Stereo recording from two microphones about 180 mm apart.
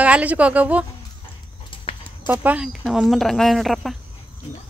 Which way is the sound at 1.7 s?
30° left (ahead or behind).